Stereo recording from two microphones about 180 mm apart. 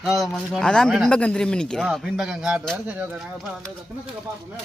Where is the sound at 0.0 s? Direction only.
Centre (ahead or behind).